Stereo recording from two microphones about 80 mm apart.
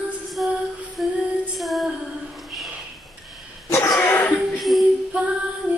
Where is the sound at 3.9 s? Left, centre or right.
Centre.